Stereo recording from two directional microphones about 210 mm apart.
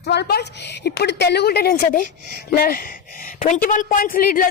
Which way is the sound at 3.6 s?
40° left (ahead or behind).